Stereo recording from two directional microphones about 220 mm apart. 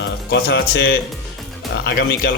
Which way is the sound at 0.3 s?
50° left (ahead or behind).